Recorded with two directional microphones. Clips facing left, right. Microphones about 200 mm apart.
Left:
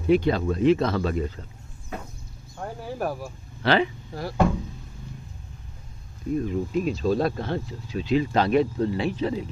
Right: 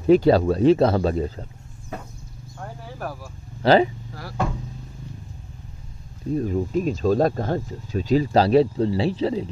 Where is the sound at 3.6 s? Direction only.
40° right (ahead or behind).